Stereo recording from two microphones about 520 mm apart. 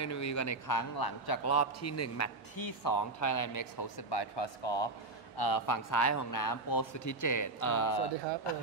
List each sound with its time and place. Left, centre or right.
0.0 s speech: left
1.5 s a man's voice: left
5.4 s speech: left